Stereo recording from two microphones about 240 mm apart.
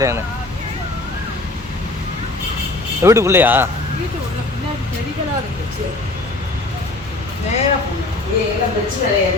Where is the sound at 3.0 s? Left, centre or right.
Centre.